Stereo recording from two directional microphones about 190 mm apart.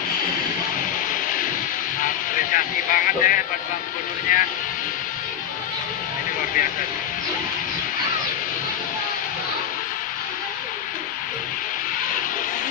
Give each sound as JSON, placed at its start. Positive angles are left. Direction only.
{"t": 2.0, "sound": "music", "side_deg": 45}
{"t": 4.3, "sound": "speech", "side_deg": 45}